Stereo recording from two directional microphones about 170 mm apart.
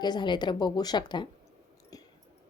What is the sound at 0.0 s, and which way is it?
A woman's voice, 25° left (ahead or behind).